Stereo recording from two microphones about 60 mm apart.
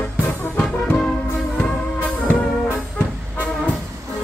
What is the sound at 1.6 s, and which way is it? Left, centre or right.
Music, left.